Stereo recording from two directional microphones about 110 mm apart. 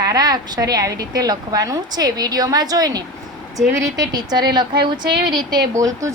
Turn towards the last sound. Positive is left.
turn(degrees=-30)  # may be behind; listen again after turning